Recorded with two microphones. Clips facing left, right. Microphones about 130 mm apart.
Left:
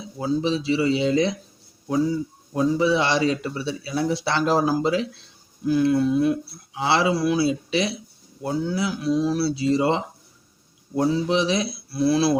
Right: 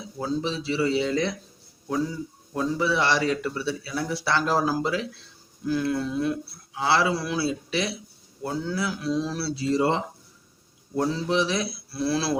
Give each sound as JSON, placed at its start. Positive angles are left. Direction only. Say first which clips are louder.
{"t": 0.2, "sound": "speech", "louder": "left 5 dB", "side_deg": 15}
{"t": 2.5, "sound": "speech", "louder": "left 5 dB", "side_deg": 15}